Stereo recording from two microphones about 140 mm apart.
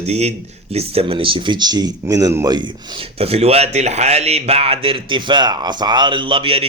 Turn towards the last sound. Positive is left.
turn(degrees=-40)  # may be behind; listen again after turning